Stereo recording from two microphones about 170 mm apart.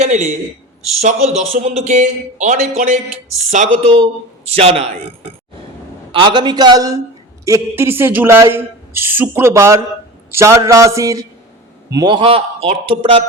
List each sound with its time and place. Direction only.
0.0 s speech: 45° right (ahead or behind)
3.9 s speech: 35° right (ahead or behind)
6.1 s a man's voice: 30° right (ahead or behind)